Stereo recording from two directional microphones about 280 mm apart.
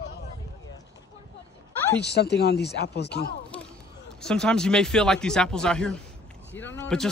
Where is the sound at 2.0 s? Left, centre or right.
Left.